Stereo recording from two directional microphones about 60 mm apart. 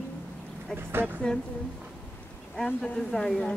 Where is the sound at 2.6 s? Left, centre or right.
Left.